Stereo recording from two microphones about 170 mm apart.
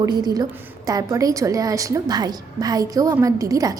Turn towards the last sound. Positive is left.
turn(degrees=-20)  # may be behind; listen again after turning